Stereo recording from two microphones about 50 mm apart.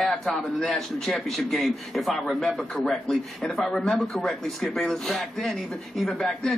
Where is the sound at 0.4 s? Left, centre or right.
Centre.